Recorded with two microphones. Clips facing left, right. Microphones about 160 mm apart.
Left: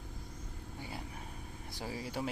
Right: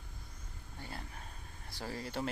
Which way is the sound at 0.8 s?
10° left (ahead or behind).